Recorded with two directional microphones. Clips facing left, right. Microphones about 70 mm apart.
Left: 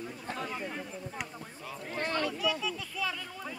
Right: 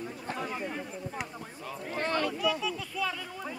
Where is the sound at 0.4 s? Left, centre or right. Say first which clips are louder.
Right 2 dB; centre.